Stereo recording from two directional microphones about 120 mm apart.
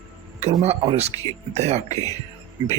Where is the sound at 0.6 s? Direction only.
55° right (ahead or behind).